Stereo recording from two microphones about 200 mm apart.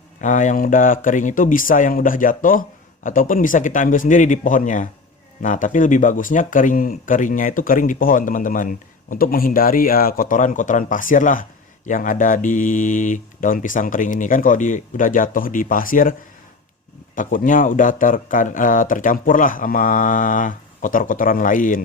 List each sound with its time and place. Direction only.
0.2 s speech: 40° left (ahead or behind)
17.2 s speech: 40° left (ahead or behind)